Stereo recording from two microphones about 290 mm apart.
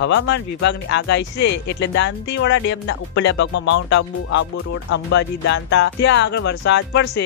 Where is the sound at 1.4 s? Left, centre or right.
Left.